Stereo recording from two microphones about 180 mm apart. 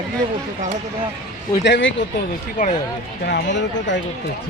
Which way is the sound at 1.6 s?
85° left.